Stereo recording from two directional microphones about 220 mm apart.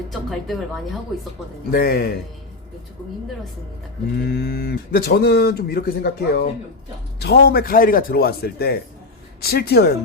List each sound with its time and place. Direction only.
0.1 s speech: centre (ahead or behind)
1.7 s speech: 45° left (ahead or behind)
4.2 s speech: 45° left (ahead or behind)